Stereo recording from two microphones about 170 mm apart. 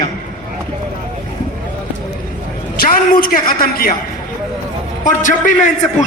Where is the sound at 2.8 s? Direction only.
55° left (ahead or behind).